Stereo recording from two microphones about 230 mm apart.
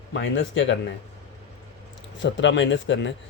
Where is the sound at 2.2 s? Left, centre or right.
Left.